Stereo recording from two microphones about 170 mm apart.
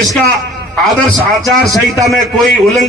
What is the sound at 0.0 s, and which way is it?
A man's voice, centre (ahead or behind).